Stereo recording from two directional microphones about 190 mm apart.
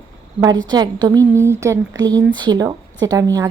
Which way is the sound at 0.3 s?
20° right (ahead or behind).